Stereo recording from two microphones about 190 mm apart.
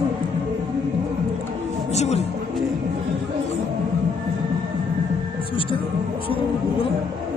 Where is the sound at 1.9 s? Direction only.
35° left (ahead or behind).